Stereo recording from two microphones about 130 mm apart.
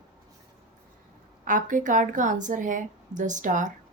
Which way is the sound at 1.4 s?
85° right.